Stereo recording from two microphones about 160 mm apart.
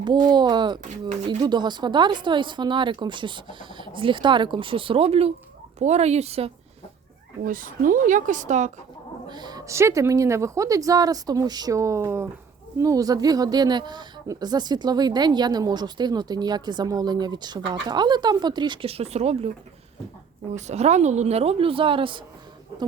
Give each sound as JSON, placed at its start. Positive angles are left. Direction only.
{"t": 0.3, "sound": "a woman's voice", "side_deg": -25}
{"t": 7.4, "sound": "speech", "side_deg": -60}
{"t": 9.3, "sound": "a woman's voice", "side_deg": -25}
{"t": 20.5, "sound": "a woman's voice", "side_deg": -45}